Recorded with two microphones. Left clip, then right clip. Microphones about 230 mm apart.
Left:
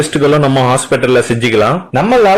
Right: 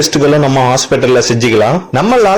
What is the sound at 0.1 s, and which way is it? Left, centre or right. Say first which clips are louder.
A man's voice: right 1 dB; right.